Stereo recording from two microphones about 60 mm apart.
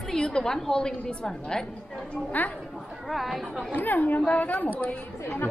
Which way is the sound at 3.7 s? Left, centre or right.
Left.